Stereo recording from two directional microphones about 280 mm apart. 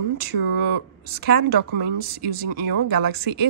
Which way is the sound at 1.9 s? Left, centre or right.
Right.